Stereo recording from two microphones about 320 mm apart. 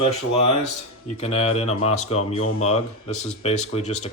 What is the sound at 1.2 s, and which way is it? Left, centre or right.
Speech, centre.